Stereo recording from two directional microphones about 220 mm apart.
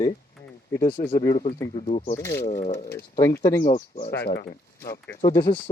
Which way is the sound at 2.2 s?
15° left (ahead or behind).